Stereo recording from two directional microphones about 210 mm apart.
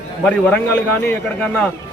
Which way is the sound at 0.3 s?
5° left (ahead or behind).